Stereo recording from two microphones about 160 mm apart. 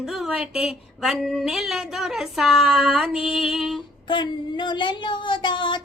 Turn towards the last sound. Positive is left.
turn(degrees=30)  # may be behind; listen again after turning